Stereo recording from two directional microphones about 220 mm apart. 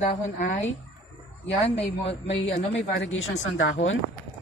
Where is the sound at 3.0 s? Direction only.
60° left (ahead or behind).